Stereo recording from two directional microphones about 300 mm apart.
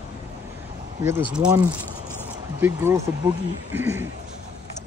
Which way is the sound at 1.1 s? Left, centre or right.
Centre.